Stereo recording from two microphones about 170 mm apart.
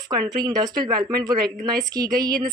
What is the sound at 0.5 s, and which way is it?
Speech, 25° right (ahead or behind).